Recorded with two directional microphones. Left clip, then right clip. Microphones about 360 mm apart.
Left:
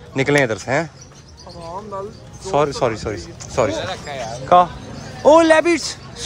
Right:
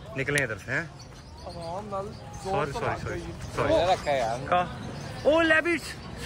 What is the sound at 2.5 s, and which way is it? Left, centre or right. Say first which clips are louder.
Speech: left 11 dB; centre.